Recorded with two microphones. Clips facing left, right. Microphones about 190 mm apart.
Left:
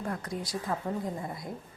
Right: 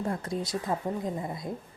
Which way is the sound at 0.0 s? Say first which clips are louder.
Right 4 dB; 25° right (ahead or behind).